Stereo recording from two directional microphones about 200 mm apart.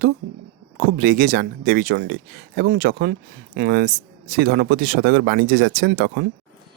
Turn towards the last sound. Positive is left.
turn(degrees=-50)  # may be behind; listen again after turning